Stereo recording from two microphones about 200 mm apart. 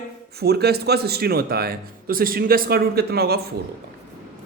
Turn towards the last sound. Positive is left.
turn(degrees=-50)  # may be behind; listen again after turning